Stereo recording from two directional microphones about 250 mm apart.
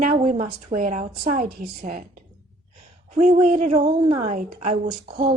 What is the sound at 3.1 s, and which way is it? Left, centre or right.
A woman's voice, right.